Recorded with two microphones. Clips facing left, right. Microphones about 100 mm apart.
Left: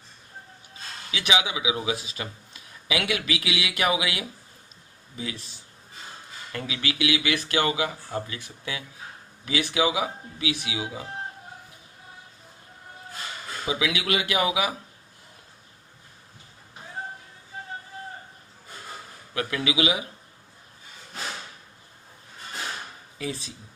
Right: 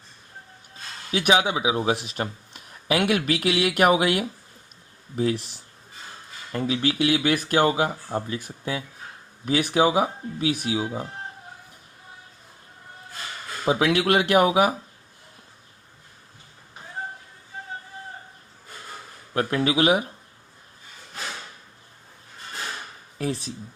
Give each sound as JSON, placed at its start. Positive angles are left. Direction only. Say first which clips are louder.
{"t": 1.1, "sound": "speech", "louder": "right 6 dB", "side_deg": -45}
{"t": 1.8, "sound": "speech", "louder": "right 5 dB", "side_deg": -60}
{"t": 2.8, "sound": "speech", "louder": "right 6 dB", "side_deg": -50}
{"t": 5.1, "sound": "speech", "louder": "right 11 dB", "side_deg": -65}
{"t": 6.7, "sound": "speech", "louder": "right 5 dB", "side_deg": -40}
{"t": 13.7, "sound": "speech", "louder": "right 7 dB", "side_deg": -55}
{"t": 19.3, "sound": "a man's voice", "louder": "right 5 dB", "side_deg": -45}
{"t": 23.1, "sound": "speech", "louder": "right 5 dB", "side_deg": -50}